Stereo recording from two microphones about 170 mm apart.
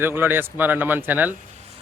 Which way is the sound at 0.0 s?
15° right (ahead or behind).